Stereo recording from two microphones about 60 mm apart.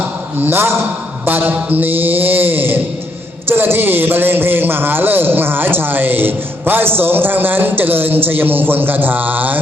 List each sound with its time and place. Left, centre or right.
0.3 s a man's voice: right